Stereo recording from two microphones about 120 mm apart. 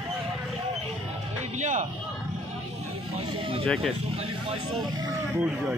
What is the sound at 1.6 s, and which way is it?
Speech, 75° right (ahead or behind).